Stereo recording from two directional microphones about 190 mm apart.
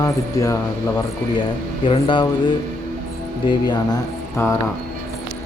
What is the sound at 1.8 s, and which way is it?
Speech, 25° left (ahead or behind).